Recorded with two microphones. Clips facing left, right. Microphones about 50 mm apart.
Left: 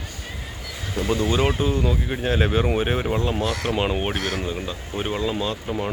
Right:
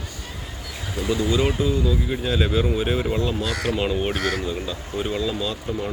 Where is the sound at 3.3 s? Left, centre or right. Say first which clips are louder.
Left 1 dB; left.